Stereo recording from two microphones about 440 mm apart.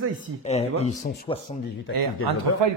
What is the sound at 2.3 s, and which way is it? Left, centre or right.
Speech, right.